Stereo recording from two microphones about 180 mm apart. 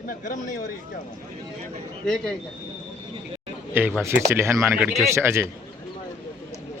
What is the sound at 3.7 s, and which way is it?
Speech, 10° right (ahead or behind).